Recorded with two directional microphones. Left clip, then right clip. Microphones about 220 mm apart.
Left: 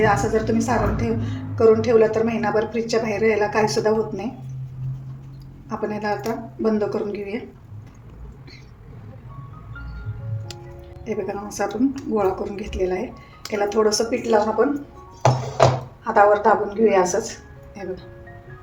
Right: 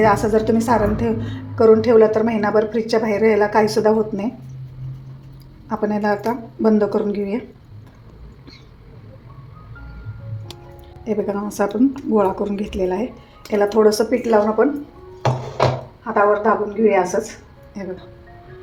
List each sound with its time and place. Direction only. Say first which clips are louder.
0.0 s a woman's voice: right 4 dB; 40° right (ahead or behind)
5.6 s a woman's voice: right 5 dB; 40° right (ahead or behind)
11.0 s a woman's voice: right 5 dB; 35° right (ahead or behind)
16.1 s speech: left 1 dB; 25° right (ahead or behind)